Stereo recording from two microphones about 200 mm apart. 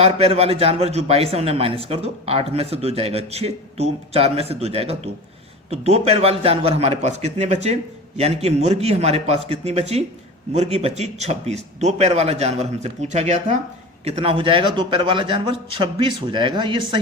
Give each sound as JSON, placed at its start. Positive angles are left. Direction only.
{"t": 0.0, "sound": "a man's voice", "side_deg": -30}